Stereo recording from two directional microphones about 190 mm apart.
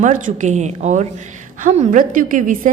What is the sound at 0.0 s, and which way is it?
A woman's voice, 40° right (ahead or behind).